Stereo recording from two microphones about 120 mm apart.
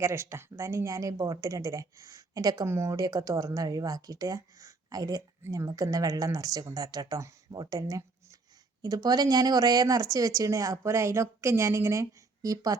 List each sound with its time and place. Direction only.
0.0 s speech: 20° right (ahead or behind)